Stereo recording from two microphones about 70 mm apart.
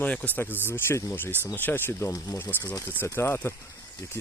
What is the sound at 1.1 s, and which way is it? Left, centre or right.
Speech, left.